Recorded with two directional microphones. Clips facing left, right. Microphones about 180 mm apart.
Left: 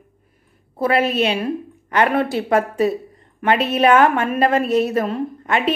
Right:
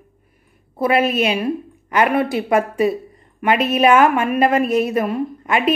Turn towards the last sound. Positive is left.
turn(degrees=-10)  # may be behind; listen again after turning